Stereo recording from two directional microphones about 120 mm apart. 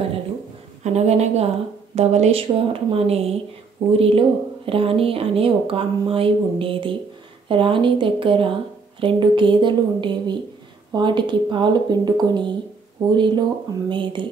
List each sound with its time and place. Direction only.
0.8 s a woman's voice: 65° right (ahead or behind); by 14.2 s 40° right (ahead or behind)